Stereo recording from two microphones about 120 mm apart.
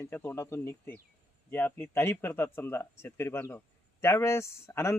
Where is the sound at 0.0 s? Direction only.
20° left (ahead or behind).